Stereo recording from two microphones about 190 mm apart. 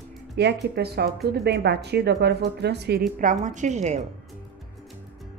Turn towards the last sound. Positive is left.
turn(degrees=-35)  # may be behind; listen again after turning